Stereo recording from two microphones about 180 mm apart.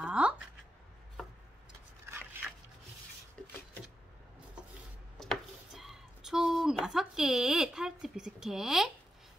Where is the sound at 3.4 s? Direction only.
5° left (ahead or behind).